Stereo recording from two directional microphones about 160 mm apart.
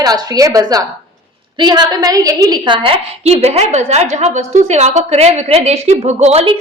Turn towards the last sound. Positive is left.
turn(degrees=-40)  # may be behind; listen again after turning